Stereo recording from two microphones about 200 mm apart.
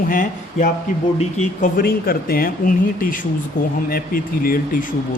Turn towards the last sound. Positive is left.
turn(degrees=45)  # may be behind; listen again after turning